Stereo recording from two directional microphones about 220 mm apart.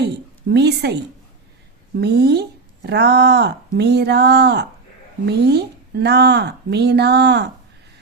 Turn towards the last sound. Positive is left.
turn(degrees=-50)  # may be behind; listen again after turning